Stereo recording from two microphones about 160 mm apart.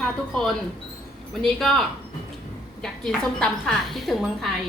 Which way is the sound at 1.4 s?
5° left (ahead or behind).